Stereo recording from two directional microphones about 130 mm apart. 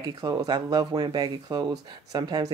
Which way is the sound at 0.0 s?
30° right (ahead or behind).